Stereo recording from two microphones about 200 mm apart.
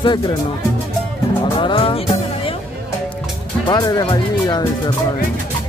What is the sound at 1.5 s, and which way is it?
Speech, 25° left (ahead or behind).